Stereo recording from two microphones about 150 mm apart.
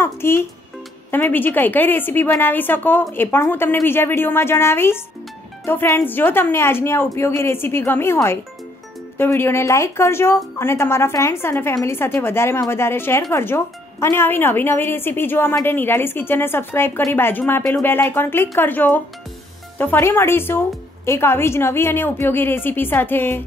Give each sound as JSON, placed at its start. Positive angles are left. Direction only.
{"t": 0.0, "sound": "a child's voice", "side_deg": 15}